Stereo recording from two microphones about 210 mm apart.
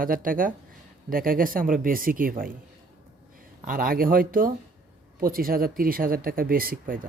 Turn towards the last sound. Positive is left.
turn(degrees=-40)  # may be behind; listen again after turning